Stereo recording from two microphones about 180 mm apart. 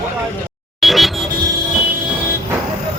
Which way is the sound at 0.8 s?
Centre (ahead or behind).